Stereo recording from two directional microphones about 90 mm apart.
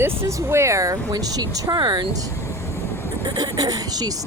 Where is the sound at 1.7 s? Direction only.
65° right (ahead or behind).